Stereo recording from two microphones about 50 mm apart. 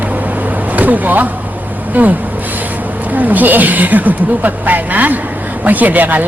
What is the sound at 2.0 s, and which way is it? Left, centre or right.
Speech, right.